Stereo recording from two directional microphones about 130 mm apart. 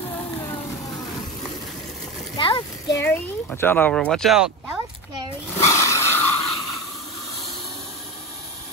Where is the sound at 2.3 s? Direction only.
40° left (ahead or behind).